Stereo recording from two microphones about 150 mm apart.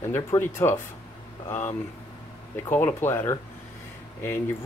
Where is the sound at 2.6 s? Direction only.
15° left (ahead or behind).